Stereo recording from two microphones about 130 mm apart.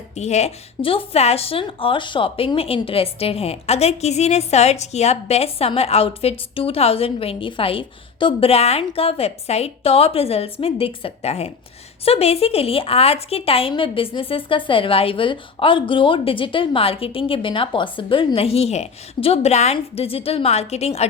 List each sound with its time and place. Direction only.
0.2 s a woman's voice: 60° left (ahead or behind)